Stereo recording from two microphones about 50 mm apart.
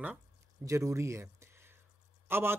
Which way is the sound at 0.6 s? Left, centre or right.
Right.